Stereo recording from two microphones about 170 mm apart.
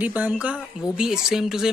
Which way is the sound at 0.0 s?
10° right (ahead or behind).